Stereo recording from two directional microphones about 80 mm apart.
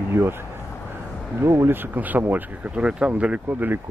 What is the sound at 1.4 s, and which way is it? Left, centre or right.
Speech, right.